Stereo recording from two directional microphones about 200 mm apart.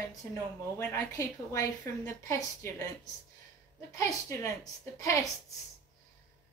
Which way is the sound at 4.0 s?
15° left (ahead or behind).